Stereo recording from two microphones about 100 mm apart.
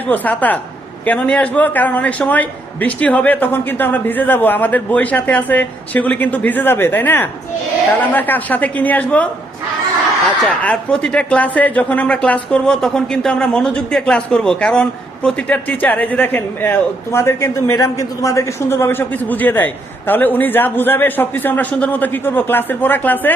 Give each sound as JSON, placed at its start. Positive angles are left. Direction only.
{"t": 0.1, "sound": "speech", "side_deg": 15}
{"t": 10.4, "sound": "speech", "side_deg": 10}